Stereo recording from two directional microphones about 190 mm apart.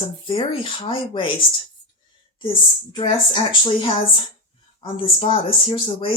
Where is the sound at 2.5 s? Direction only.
25° left (ahead or behind).